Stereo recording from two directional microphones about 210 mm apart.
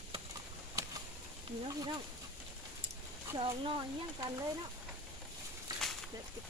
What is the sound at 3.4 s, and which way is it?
Speech, 25° right (ahead or behind).